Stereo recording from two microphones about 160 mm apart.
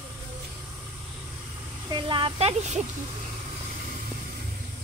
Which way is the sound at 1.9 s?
30° right (ahead or behind).